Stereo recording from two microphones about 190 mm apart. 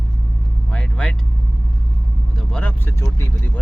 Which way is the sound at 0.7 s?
5° left (ahead or behind).